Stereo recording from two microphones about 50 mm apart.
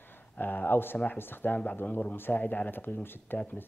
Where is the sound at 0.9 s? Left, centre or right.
Left.